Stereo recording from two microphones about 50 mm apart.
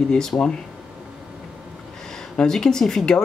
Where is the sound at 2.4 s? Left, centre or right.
Centre.